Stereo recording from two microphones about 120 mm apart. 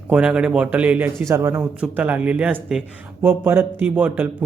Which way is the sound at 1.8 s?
15° right (ahead or behind).